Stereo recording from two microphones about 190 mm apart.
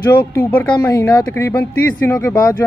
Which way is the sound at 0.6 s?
15° left (ahead or behind).